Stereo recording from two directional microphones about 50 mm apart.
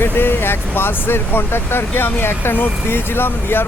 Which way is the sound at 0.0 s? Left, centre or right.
Left.